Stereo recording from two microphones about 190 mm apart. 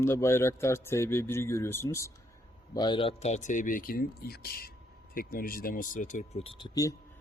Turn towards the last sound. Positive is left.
turn(degrees=20)  # may be behind; listen again after turning